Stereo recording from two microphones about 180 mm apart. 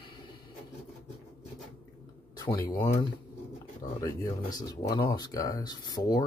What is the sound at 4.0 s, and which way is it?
Speech, 20° left (ahead or behind).